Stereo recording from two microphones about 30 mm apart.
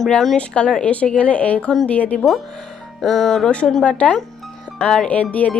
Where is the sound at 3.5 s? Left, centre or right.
Left.